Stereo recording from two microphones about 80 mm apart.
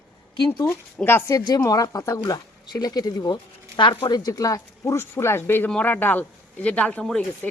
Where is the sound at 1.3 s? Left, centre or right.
Left.